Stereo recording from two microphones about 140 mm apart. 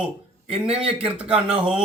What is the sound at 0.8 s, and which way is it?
Speech, 45° right (ahead or behind).